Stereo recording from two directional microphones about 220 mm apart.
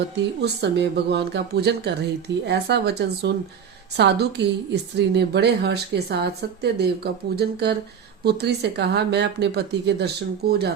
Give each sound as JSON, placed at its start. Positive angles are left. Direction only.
{"t": 0.4, "sound": "speech", "side_deg": -50}